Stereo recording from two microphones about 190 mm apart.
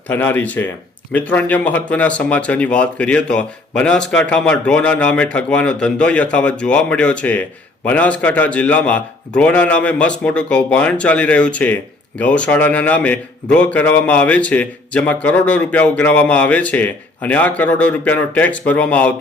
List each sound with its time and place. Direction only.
0.1 s a man's voice: 10° left (ahead or behind)